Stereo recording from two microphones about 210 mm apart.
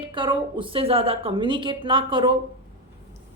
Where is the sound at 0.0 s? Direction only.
25° right (ahead or behind).